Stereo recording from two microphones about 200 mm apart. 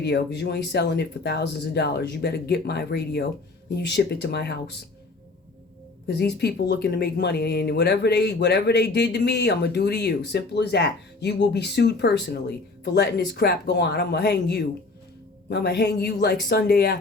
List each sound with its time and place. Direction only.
0.0 s speech: 55° left (ahead or behind)
6.1 s speech: 55° left (ahead or behind)